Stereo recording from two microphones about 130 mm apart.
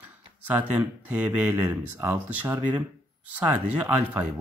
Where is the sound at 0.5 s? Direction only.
10° right (ahead or behind).